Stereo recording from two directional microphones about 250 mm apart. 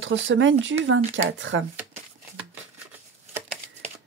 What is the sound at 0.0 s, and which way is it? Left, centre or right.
Speech, right.